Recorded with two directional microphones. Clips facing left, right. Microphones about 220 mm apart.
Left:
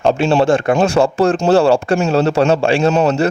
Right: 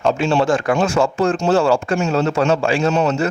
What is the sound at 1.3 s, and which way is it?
Speech, 70° left (ahead or behind).